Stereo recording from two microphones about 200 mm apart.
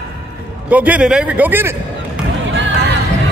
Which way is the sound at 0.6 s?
10° right (ahead or behind).